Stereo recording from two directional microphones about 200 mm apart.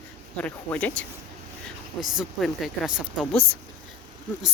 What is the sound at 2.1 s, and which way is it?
Speech, centre (ahead or behind).